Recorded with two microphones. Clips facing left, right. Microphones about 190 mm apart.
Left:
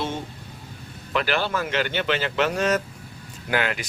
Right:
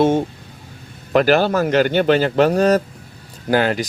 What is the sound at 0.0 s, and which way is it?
Speech, 50° right (ahead or behind).